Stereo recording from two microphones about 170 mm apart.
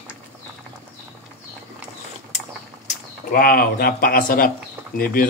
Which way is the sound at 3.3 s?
55° left (ahead or behind).